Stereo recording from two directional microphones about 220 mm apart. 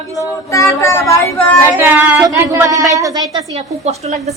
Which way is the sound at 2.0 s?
10° right (ahead or behind).